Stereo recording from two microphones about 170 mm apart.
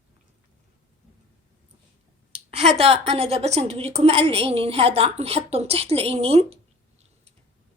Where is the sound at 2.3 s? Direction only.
35° right (ahead or behind).